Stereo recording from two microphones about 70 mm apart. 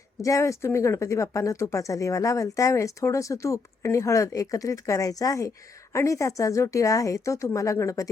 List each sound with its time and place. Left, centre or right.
0.2 s speech: left